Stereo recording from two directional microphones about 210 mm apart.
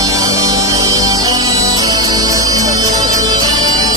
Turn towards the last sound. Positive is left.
turn(degrees=-15)  # may be behind; listen again after turning